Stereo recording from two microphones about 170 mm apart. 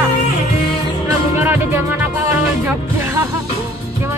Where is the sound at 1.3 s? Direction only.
15° right (ahead or behind).